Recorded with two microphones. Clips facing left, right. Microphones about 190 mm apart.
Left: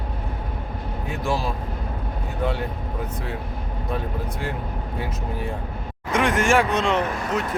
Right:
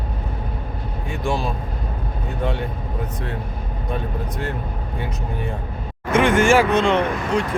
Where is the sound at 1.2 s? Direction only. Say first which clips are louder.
Right 2 dB; 5° left (ahead or behind).